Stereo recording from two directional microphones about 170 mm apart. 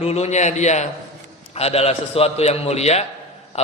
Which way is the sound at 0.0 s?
40° left (ahead or behind).